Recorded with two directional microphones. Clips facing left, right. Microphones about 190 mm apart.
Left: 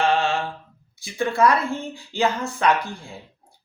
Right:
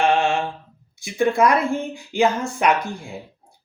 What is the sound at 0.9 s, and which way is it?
Speech, 15° right (ahead or behind).